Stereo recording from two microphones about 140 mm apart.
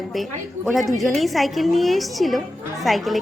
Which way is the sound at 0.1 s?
Centre (ahead or behind).